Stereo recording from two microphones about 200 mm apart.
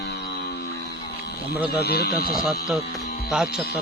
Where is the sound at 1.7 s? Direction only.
55° left (ahead or behind).